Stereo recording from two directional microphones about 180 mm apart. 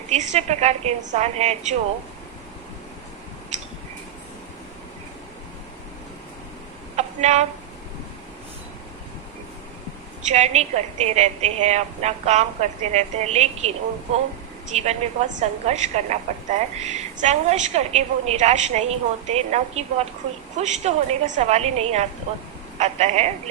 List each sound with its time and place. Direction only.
0.1 s a woman's voice: 40° right (ahead or behind)
6.9 s a sound: 40° right (ahead or behind)
10.2 s a woman's voice: 40° right (ahead or behind)